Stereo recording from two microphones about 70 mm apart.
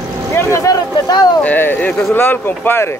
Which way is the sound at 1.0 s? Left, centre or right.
Left.